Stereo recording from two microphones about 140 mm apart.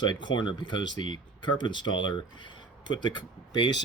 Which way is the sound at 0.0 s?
35° left (ahead or behind).